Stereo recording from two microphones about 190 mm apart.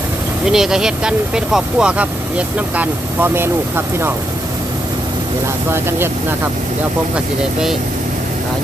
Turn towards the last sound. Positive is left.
turn(degrees=-5)  # may be behind; listen again after turning